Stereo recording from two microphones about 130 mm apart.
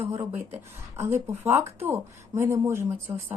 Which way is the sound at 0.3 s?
20° right (ahead or behind).